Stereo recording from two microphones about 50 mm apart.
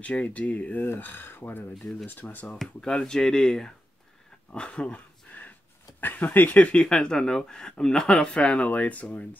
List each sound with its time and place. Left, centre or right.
0.0 s speech: left
0.9 s speech: left
2.8 s speech: centre
5.3 s a sound: left
5.9 s speech: left
6.9 s speech: centre; by 9.4 s left